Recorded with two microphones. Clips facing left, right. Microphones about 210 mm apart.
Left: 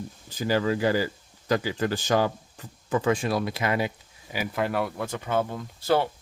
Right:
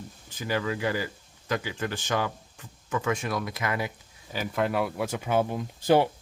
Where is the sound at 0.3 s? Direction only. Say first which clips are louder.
Left 5 dB; 35° left (ahead or behind).